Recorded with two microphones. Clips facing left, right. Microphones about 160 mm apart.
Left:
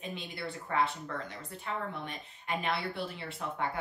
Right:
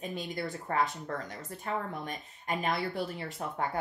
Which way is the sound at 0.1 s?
40° right (ahead or behind).